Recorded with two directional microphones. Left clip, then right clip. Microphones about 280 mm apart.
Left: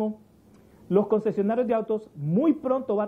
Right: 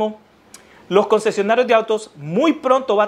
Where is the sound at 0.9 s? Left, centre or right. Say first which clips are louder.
Right 8 dB; centre.